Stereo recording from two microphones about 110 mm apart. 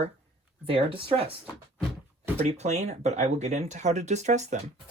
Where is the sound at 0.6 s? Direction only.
55° right (ahead or behind).